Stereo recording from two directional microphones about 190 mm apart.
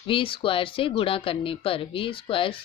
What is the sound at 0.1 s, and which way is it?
A woman's voice, 25° left (ahead or behind).